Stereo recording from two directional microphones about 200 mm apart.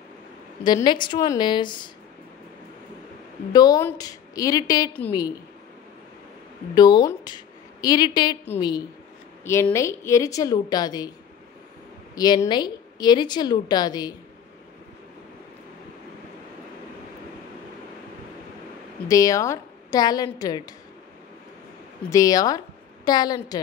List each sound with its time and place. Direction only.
0.7 s a woman's voice: 20° left (ahead or behind)
3.5 s a woman's voice: 20° left (ahead or behind)
6.7 s a woman's voice: 20° left (ahead or behind)
12.2 s a woman's voice: 20° left (ahead or behind)
19.0 s a woman's voice: 15° left (ahead or behind)
22.1 s a woman's voice: 15° left (ahead or behind)